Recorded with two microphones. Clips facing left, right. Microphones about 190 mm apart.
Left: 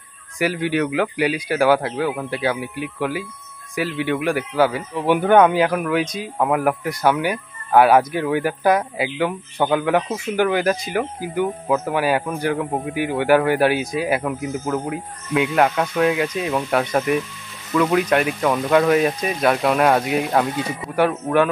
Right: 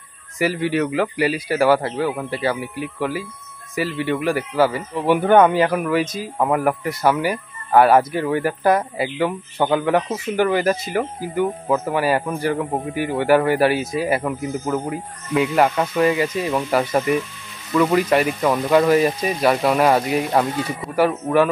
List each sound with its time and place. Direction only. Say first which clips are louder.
0.4 s speech: right 1 dB; centre (ahead or behind)